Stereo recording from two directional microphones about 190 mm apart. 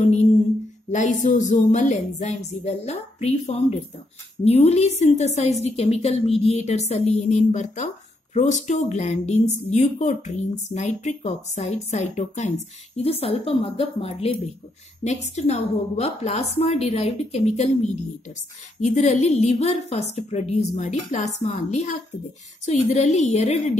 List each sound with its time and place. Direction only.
0.0 s a woman's voice: 35° left (ahead or behind)
18.8 s a woman's voice: 40° left (ahead or behind)